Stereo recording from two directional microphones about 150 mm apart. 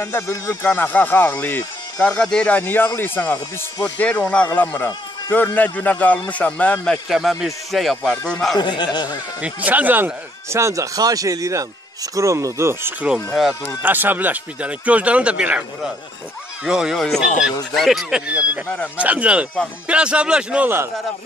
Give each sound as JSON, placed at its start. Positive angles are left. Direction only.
{"t": 0.0, "sound": "speech", "side_deg": 20}
{"t": 7.1, "sound": "speech", "side_deg": 0}
{"t": 8.5, "sound": "a man's voice", "side_deg": 30}
{"t": 9.4, "sound": "speech", "side_deg": -10}
{"t": 13.1, "sound": "speech", "side_deg": 0}
{"t": 13.8, "sound": "speech", "side_deg": -15}